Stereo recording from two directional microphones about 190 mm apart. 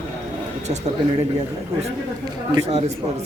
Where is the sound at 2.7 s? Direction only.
35° right (ahead or behind).